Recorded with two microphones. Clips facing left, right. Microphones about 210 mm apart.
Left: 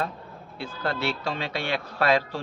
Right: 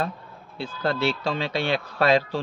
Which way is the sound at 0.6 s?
30° right (ahead or behind).